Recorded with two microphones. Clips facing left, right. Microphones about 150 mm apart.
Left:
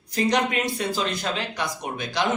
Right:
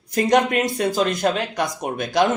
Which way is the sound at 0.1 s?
50° right (ahead or behind).